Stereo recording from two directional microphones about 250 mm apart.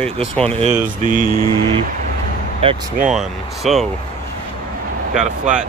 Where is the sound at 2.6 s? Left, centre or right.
Right.